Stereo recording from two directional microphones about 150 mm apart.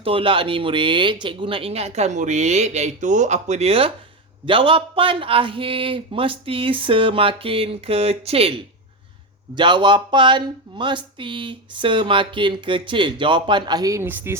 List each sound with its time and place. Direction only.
0.0 s speech: 35° right (ahead or behind)
9.6 s speech: 30° right (ahead or behind); by 14.3 s 15° right (ahead or behind)